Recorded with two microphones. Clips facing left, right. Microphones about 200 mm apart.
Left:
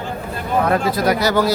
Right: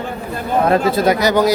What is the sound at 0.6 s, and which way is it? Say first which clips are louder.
Speech: right 4 dB; 25° right (ahead or behind).